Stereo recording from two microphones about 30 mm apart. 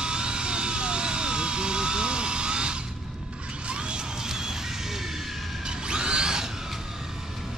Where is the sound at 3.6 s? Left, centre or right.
Right.